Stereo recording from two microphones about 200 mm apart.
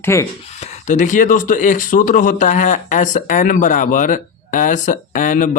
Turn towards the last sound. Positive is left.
turn(degrees=40)  # may be behind; listen again after turning